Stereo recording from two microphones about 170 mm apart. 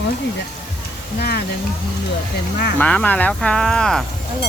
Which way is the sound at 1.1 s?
70° left (ahead or behind).